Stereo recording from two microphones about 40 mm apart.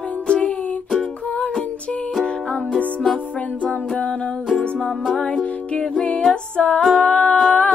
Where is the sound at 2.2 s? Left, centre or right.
Left.